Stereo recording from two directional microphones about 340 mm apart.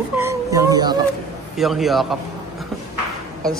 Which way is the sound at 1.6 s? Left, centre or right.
Centre.